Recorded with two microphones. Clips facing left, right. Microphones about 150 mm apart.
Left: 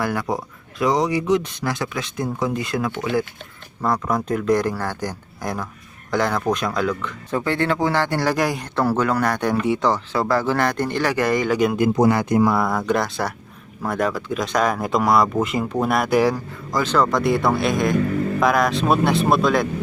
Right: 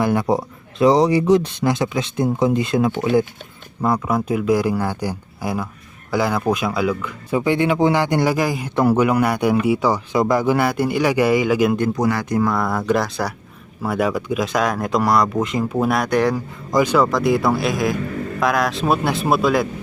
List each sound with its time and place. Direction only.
0.0 s speech: 20° right (ahead or behind)
1.6 s speech: 20° right (ahead or behind)
3.8 s speech: 10° right (ahead or behind)
8.4 s speech: centre (ahead or behind)
8.7 s speech: 15° right (ahead or behind)
11.9 s speech: 25° left (ahead or behind)
12.5 s speech: centre (ahead or behind)
16.7 s speech: 10° right (ahead or behind)
17.1 s speech: centre (ahead or behind)